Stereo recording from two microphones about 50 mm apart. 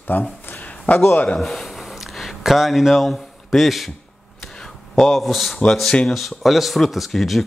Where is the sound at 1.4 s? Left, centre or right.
Centre.